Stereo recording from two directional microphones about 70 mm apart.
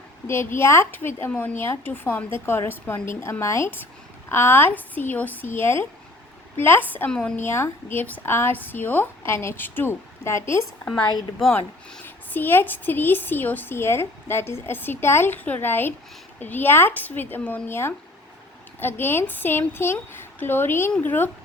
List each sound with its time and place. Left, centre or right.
0.3 s a woman's voice: left
4.3 s a woman's voice: left
7.1 s speech: centre
7.3 s a woman's voice: left
12.0 s a woman's voice: left